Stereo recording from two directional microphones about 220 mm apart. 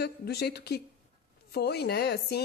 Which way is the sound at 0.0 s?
45° left (ahead or behind).